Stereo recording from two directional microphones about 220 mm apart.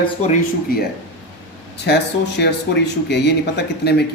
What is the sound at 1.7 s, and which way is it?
Speech, 50° left (ahead or behind).